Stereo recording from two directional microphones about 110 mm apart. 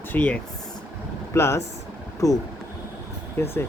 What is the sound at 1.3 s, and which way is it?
Speech, 25° left (ahead or behind).